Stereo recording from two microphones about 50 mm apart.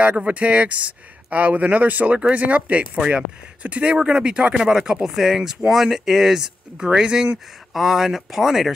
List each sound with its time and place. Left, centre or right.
0.2 s speech: right
7.7 s speech: centre